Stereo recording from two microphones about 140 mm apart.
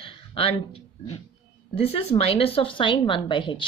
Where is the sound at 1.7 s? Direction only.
45° left (ahead or behind).